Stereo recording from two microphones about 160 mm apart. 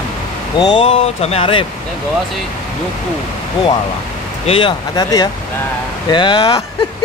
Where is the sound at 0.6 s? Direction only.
30° left (ahead or behind).